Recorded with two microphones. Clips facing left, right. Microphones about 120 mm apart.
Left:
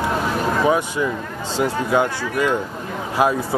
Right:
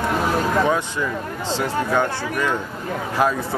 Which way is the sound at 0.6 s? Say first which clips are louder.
Left 3 dB; 10° left (ahead or behind).